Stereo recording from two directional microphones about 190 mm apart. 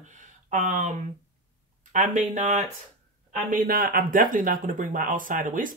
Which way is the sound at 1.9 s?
40° right (ahead or behind).